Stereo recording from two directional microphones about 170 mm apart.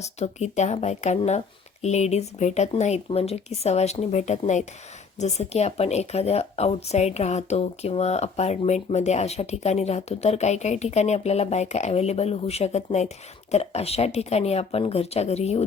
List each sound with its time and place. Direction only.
0.0 s speech: 40° left (ahead or behind)